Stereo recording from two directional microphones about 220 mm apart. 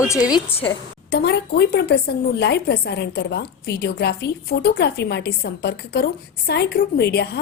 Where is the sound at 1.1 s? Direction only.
50° left (ahead or behind).